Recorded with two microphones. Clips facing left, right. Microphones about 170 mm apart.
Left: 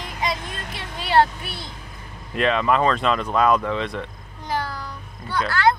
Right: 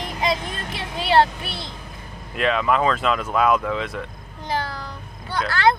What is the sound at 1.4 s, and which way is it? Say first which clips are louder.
Speech: right 2 dB; 80° right.